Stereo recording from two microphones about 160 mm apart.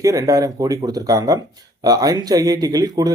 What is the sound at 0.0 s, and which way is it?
Speech, 20° right (ahead or behind).